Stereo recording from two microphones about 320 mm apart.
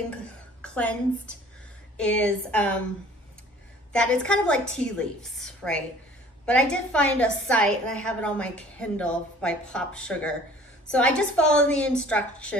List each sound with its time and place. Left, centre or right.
0.1 s a woman's voice: centre
3.9 s a woman's voice: centre